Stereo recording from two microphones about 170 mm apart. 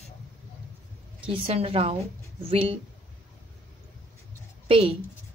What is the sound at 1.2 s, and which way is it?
A woman's voice, 35° right (ahead or behind).